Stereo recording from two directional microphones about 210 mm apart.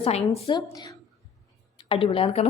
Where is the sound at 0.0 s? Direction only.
25° left (ahead or behind).